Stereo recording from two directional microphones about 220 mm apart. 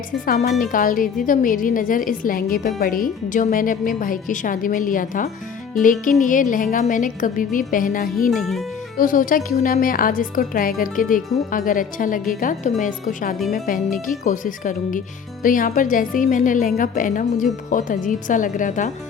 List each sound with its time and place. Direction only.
0.3 s a woman's voice: 30° left (ahead or behind)
8.3 s speech: centre (ahead or behind)
9.0 s a woman's voice: 40° left (ahead or behind)